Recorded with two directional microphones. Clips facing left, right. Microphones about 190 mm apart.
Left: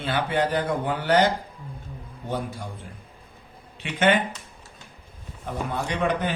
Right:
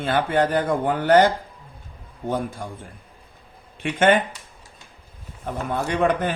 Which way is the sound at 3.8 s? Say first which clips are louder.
Right 7 dB; 50° right (ahead or behind).